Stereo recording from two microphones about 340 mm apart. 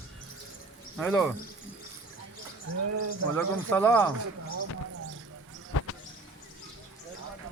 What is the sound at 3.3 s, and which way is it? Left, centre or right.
Speech, centre.